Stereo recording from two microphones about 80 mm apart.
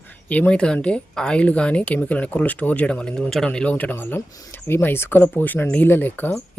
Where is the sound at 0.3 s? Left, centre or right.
Centre.